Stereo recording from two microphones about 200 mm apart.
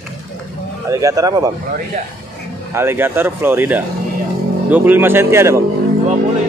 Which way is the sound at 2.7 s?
10° right (ahead or behind).